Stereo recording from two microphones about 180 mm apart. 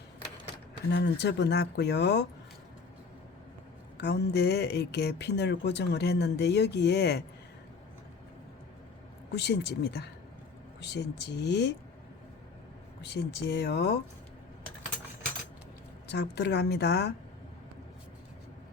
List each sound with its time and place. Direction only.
0.9 s speech: 70° left (ahead or behind)
3.9 s speech: 70° left (ahead or behind)
9.3 s speech: 65° left (ahead or behind)
13.0 s speech: 70° left (ahead or behind)
16.1 s speech: 70° left (ahead or behind)